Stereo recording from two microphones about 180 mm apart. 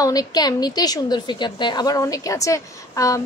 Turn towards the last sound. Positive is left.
turn(degrees=20)  # may be behind; listen again after turning